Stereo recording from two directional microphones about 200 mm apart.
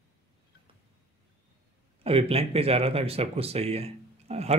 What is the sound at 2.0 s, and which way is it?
Speech, 30° right (ahead or behind).